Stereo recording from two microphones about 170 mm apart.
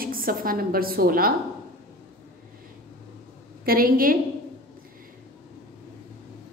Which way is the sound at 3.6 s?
60° right (ahead or behind).